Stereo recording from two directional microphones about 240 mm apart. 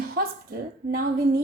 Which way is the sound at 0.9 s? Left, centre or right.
Right.